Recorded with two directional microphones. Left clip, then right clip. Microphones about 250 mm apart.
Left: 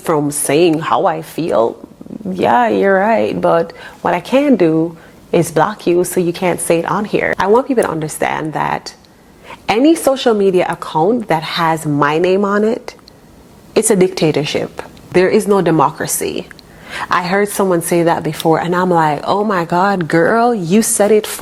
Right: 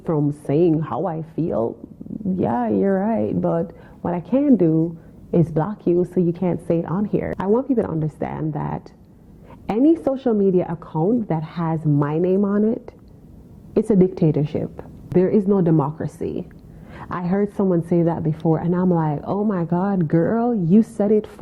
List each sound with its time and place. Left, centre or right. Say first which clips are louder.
0.4 s a woman's voice: left 7 dB; centre
10.9 s speech: left 7 dB; left
11.3 s a woman's voice: left 12 dB; centre